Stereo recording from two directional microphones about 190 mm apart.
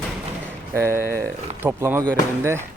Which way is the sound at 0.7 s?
15° right (ahead or behind).